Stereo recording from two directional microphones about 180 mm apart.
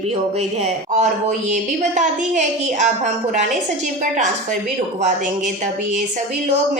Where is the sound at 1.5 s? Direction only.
40° right (ahead or behind).